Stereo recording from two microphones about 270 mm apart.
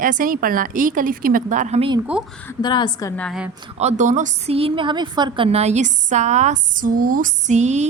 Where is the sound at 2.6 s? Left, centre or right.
Centre.